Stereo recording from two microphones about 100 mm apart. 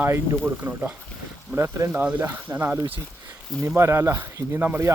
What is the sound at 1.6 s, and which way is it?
Speech, 30° right (ahead or behind).